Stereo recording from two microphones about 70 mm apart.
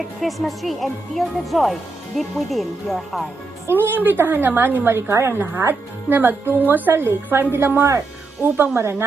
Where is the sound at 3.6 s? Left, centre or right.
Right.